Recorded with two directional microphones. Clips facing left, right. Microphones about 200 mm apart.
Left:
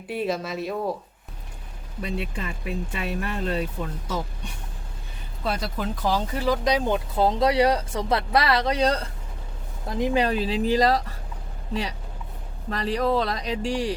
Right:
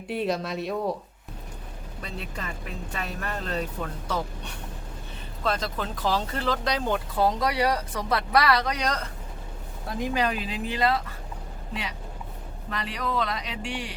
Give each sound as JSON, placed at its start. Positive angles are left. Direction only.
{"t": 0.1, "sound": "speech", "side_deg": 0}
{"t": 2.0, "sound": "speech", "side_deg": 10}
{"t": 5.4, "sound": "speech", "side_deg": 10}